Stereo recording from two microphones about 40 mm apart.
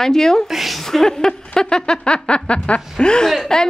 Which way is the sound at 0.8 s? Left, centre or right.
Centre.